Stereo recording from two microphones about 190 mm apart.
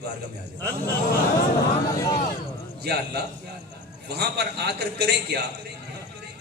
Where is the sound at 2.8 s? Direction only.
60° right (ahead or behind).